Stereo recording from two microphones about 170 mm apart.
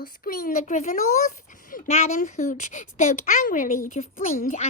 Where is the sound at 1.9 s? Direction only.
40° left (ahead or behind).